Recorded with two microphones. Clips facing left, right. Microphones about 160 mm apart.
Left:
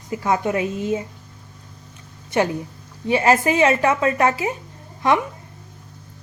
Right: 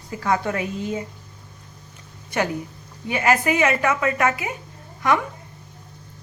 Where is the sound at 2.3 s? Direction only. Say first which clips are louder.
Left 4 dB; 25° left (ahead or behind).